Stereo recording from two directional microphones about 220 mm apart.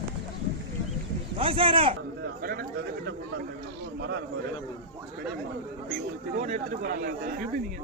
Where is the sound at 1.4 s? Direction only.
25° right (ahead or behind).